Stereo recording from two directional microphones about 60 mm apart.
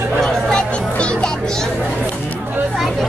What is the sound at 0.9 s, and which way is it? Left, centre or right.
Music, centre.